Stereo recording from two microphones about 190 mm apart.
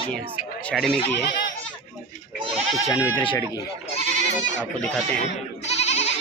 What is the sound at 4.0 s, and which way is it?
Goat, 40° right (ahead or behind).